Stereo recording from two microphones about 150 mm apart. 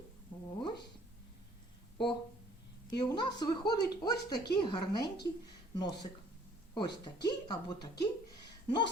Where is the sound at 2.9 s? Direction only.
30° left (ahead or behind).